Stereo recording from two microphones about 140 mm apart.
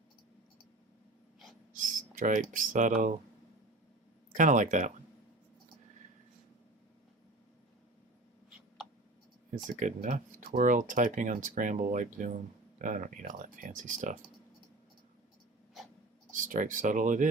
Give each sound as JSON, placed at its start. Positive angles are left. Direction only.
{"t": 1.7, "sound": "speech", "side_deg": -70}
{"t": 4.4, "sound": "speech", "side_deg": -65}
{"t": 9.8, "sound": "speech", "side_deg": -65}
{"t": 16.3, "sound": "speech", "side_deg": -70}